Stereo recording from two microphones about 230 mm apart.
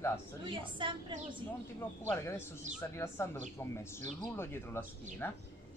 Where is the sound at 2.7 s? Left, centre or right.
Centre.